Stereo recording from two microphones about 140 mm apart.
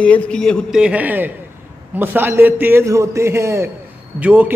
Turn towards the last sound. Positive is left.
turn(degrees=-10)  # may be behind; listen again after turning